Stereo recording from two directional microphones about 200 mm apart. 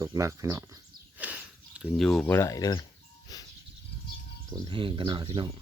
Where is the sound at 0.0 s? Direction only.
15° right (ahead or behind); by 2.8 s 20° left (ahead or behind).